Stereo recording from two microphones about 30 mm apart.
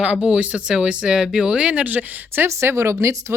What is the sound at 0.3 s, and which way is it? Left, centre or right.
Speech, right.